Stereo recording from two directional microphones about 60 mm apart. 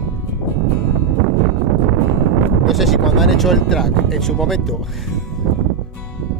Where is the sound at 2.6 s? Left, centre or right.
Centre.